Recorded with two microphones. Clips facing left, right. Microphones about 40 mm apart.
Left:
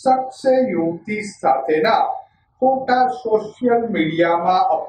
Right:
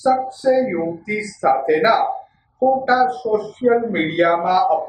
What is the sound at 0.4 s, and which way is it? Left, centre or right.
A man's voice, centre.